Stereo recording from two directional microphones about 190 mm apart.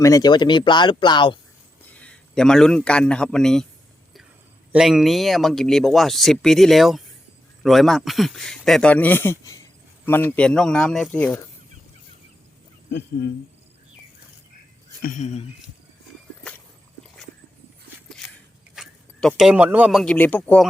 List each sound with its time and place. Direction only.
0.0 s speech: 20° left (ahead or behind)
1.8 s a man's voice: 5° left (ahead or behind)
4.7 s speech: 5° right (ahead or behind)
15.0 s speech: 40° left (ahead or behind)
18.2 s a sound: centre (ahead or behind)
18.8 s speech: centre (ahead or behind)